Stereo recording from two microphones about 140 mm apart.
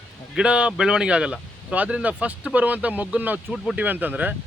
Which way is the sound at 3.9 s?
10° right (ahead or behind).